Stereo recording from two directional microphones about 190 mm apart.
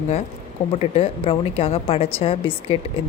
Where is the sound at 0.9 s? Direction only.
30° left (ahead or behind).